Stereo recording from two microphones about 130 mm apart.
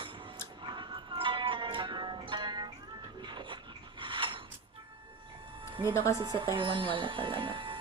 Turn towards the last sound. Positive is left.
turn(degrees=-40)  # may be behind; listen again after turning